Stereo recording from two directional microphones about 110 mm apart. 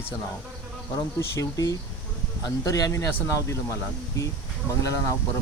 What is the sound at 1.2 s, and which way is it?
Speech, 30° left (ahead or behind).